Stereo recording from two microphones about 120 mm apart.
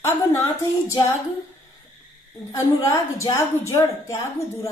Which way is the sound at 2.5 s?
25° left (ahead or behind).